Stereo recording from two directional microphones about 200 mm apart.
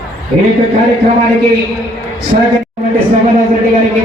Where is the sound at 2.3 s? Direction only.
40° right (ahead or behind).